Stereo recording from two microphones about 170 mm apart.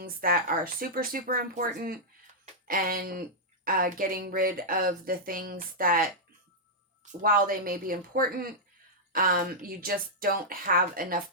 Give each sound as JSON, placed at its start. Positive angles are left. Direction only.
{"t": 0.0, "sound": "a woman's voice", "side_deg": -55}